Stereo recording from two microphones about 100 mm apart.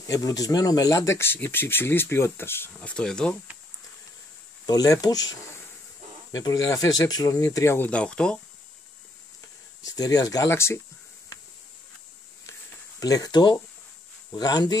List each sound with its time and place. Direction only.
0.0 s speech: 35° left (ahead or behind)
2.8 s speech: 10° left (ahead or behind)
4.6 s speech: 35° left (ahead or behind)
6.3 s speech: 35° left (ahead or behind)
7.4 s speech: 25° left (ahead or behind)
7.9 s speech: 10° left (ahead or behind)
9.4 s a sound: 40° left (ahead or behind)
10.5 s speech: 25° left (ahead or behind)
13.0 s speech: 40° left (ahead or behind)